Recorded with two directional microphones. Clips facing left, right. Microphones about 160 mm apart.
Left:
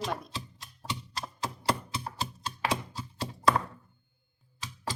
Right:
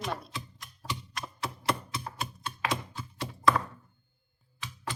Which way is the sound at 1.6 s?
30° left (ahead or behind).